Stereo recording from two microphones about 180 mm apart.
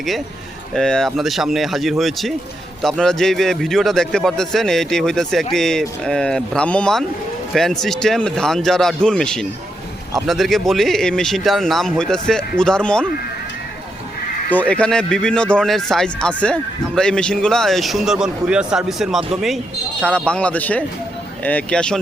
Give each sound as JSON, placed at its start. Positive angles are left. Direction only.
{"t": 0.7, "sound": "speech", "side_deg": 5}
{"t": 14.5, "sound": "speech", "side_deg": 5}